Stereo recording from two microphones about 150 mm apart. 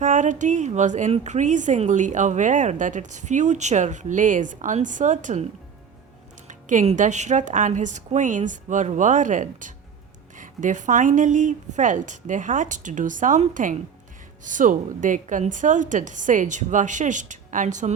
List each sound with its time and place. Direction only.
0.0 s speech: 55° right (ahead or behind)
6.5 s speech: 55° right (ahead or behind)